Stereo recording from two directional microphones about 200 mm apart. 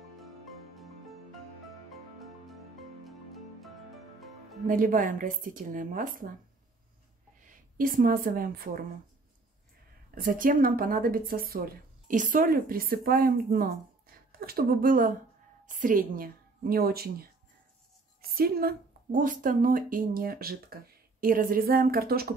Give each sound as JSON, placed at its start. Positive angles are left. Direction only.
{"t": 4.6, "sound": "speech", "side_deg": -40}
{"t": 7.4, "sound": "a woman's voice", "side_deg": -45}
{"t": 10.1, "sound": "a woman's voice", "side_deg": -45}
{"t": 18.3, "sound": "speech", "side_deg": -50}